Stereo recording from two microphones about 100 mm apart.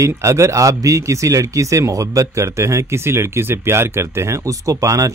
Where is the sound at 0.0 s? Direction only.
30° right (ahead or behind).